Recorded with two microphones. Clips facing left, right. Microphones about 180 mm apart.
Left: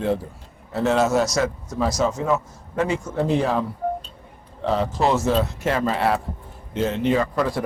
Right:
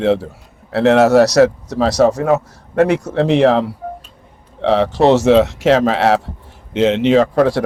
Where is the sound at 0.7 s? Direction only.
70° right (ahead or behind).